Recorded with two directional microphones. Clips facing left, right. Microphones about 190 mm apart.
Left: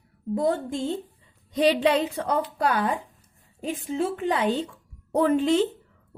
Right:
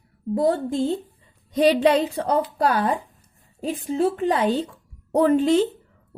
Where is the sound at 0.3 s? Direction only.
35° right (ahead or behind).